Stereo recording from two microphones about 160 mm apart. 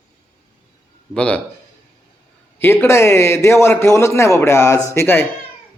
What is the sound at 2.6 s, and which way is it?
A man's voice, 15° left (ahead or behind).